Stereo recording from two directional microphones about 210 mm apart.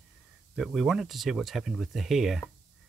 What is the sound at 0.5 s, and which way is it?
Speech, centre (ahead or behind).